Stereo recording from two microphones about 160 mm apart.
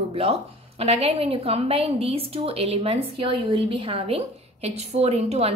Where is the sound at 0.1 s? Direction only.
40° right (ahead or behind).